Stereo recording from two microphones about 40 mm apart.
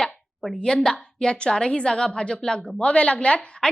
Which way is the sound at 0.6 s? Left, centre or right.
Centre.